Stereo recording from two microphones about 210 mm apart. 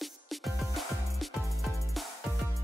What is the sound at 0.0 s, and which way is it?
Music, centre (ahead or behind).